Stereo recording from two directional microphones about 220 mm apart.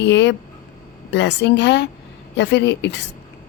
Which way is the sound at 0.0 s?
50° left (ahead or behind).